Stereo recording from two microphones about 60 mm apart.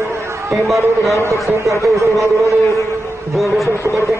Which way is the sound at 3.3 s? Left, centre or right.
Centre.